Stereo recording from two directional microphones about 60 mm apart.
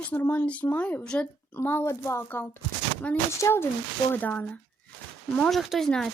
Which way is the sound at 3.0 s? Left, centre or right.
Centre.